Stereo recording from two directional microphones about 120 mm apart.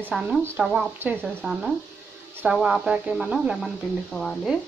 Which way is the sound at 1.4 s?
5° right (ahead or behind).